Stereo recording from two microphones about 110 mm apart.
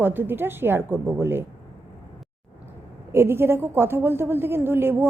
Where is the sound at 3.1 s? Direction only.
20° right (ahead or behind).